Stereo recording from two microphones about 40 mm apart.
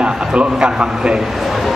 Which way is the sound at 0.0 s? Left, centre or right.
Right.